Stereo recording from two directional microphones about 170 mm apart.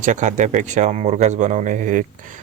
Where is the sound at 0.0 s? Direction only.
45° right (ahead or behind).